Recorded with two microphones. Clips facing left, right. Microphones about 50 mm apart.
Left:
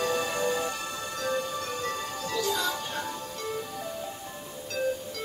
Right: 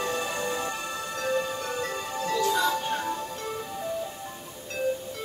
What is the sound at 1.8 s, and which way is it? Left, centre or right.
Music, right.